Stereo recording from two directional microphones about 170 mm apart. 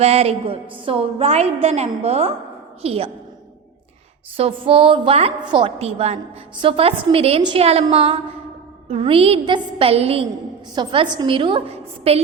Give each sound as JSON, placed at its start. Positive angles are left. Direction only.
{"t": 0.0, "sound": "a woman's voice", "side_deg": -35}
{"t": 4.4, "sound": "a woman's voice", "side_deg": -35}